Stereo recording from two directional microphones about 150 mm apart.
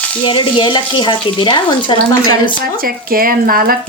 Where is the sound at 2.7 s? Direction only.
75° right (ahead or behind).